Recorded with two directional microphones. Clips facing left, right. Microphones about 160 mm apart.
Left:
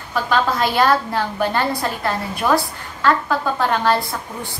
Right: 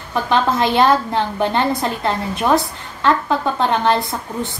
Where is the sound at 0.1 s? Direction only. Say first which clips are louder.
Right 2 dB; 20° right (ahead or behind).